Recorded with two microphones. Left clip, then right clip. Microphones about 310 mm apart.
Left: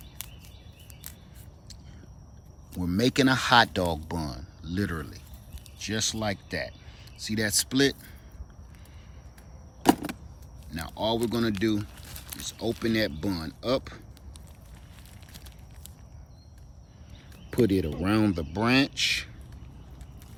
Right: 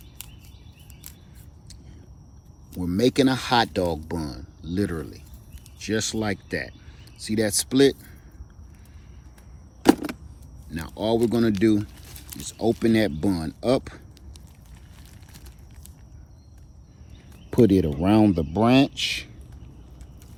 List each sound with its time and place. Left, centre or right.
2.7 s speech: centre
9.8 s vehicle: centre
10.7 s speech: centre
17.5 s speech: centre